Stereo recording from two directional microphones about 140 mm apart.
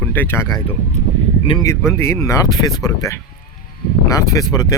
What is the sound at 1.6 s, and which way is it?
Speech, 20° left (ahead or behind).